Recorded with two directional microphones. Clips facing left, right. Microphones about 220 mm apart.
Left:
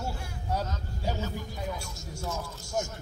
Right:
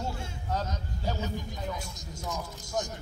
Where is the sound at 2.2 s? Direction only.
15° right (ahead or behind).